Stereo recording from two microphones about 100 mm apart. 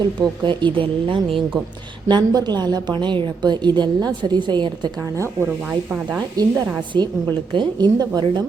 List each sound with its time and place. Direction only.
0.4 s speech: 55° right (ahead or behind)
2.0 s a woman's voice: 45° right (ahead or behind)
5.1 s speech: 30° right (ahead or behind)
6.4 s a woman's voice: 40° right (ahead or behind)